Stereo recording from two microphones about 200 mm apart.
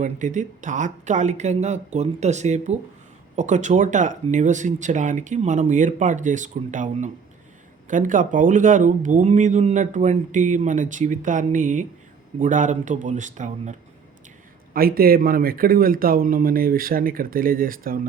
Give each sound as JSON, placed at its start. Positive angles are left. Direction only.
{"t": 0.0, "sound": "speech", "side_deg": -40}
{"t": 14.7, "sound": "speech", "side_deg": -45}